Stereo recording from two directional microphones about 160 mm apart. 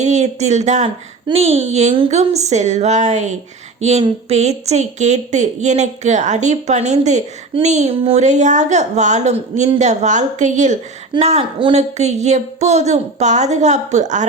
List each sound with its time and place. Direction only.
0.0 s speech: 45° right (ahead or behind)
3.8 s a sound: 45° right (ahead or behind)
4.3 s speech: 45° right (ahead or behind)